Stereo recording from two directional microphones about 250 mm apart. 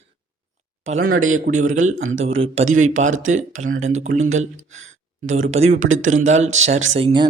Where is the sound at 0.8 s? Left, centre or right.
Right.